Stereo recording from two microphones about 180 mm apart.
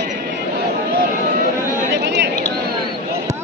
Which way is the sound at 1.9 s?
70° right (ahead or behind).